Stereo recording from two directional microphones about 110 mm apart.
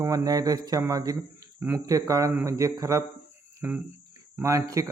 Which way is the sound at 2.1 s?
30° right (ahead or behind).